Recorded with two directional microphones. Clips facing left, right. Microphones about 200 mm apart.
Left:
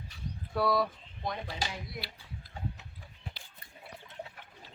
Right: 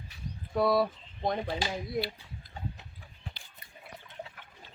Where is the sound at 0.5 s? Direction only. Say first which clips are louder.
Right 3 dB; 20° right (ahead or behind).